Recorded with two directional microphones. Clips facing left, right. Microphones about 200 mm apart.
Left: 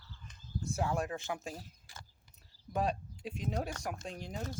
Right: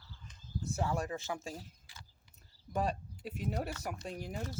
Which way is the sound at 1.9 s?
45° left (ahead or behind).